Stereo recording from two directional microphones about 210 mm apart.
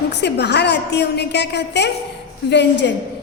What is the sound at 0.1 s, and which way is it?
A woman's voice, 55° left (ahead or behind).